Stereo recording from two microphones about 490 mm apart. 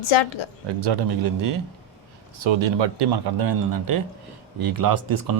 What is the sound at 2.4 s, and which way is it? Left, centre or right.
Speech, right.